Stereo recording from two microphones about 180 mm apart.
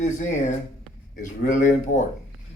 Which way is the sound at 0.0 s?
45° left (ahead or behind).